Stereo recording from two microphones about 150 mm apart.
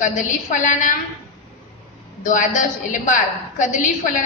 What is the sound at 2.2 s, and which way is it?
A woman's voice, 60° left (ahead or behind).